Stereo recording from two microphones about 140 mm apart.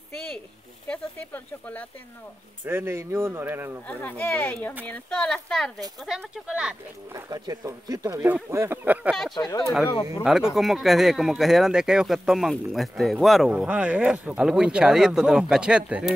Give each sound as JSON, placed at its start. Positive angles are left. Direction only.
{"t": 0.8, "sound": "speech", "side_deg": 10}
{"t": 2.6, "sound": "speech", "side_deg": -15}
{"t": 3.8, "sound": "speech", "side_deg": 10}
{"t": 6.0, "sound": "speech", "side_deg": -5}
{"t": 7.2, "sound": "speech", "side_deg": -25}
{"t": 9.3, "sound": "speech", "side_deg": 30}
{"t": 10.2, "sound": "speech", "side_deg": -5}